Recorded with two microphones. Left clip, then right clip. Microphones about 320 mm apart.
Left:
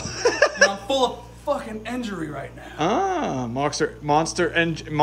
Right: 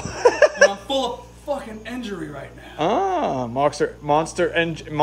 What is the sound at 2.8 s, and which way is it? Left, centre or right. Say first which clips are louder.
Speech: right 2 dB; centre.